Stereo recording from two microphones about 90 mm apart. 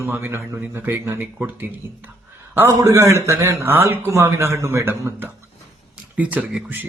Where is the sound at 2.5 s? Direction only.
30° right (ahead or behind).